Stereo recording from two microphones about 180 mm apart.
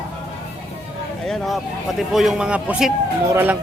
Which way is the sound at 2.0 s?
Centre (ahead or behind).